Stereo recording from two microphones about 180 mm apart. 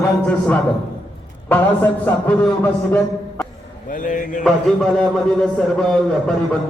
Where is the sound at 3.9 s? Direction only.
50° left (ahead or behind).